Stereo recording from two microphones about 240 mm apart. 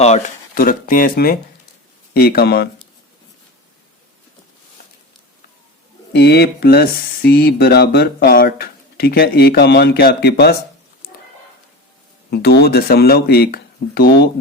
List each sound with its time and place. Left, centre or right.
0.0 s speech: left
6.1 s speech: left
12.3 s speech: left